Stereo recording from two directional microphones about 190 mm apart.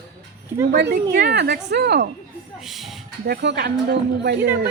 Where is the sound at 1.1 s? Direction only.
60° right (ahead or behind).